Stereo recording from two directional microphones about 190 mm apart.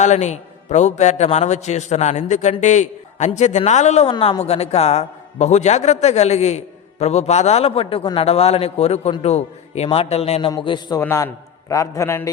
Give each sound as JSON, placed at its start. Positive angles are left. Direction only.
{"t": 0.0, "sound": "a man's voice", "side_deg": 40}